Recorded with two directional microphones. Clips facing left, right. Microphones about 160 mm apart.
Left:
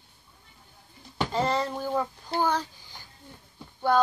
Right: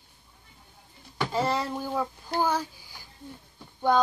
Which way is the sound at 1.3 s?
5° right (ahead or behind).